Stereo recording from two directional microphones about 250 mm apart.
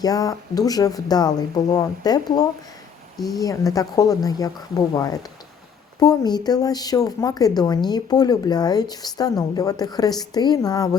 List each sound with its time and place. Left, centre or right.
0.0 s speech: centre